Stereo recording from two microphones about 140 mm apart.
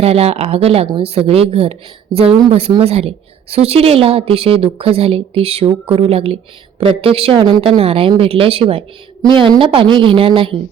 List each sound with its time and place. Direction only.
0.0 s a woman's voice: 45° right (ahead or behind)